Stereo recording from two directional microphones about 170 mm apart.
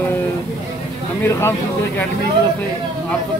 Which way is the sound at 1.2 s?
15° left (ahead or behind).